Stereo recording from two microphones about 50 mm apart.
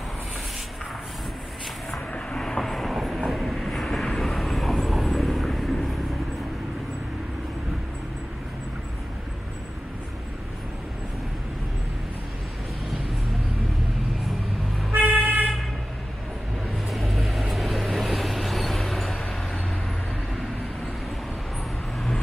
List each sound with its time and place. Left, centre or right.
2.3 s vehicle: centre
2.9 s train: centre
3.3 s vehicle: centre
14.9 s toot: right
16.9 s vehicle: centre